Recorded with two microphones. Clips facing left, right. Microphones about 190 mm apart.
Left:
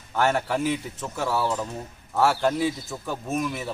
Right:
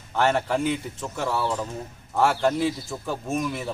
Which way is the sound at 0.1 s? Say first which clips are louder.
Right 1 dB; centre (ahead or behind).